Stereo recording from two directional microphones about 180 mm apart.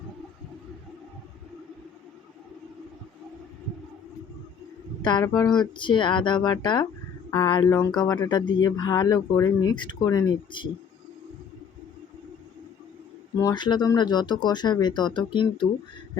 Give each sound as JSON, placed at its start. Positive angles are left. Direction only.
{"t": 5.0, "sound": "speech", "side_deg": 20}
{"t": 13.4, "sound": "speech", "side_deg": 25}